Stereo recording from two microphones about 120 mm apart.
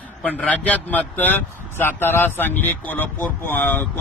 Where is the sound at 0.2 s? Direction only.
10° left (ahead or behind).